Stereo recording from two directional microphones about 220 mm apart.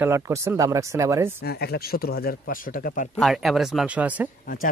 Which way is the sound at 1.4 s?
45° left (ahead or behind).